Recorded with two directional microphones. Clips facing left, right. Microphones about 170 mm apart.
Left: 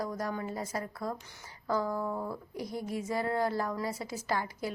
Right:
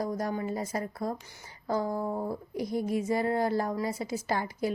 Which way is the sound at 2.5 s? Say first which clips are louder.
Right 7 dB; 20° right (ahead or behind).